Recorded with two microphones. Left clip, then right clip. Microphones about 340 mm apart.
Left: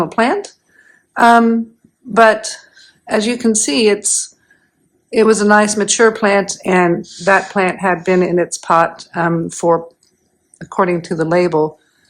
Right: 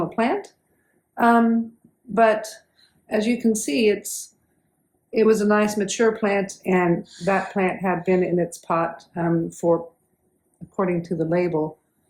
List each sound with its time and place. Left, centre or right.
0.1 s speech: left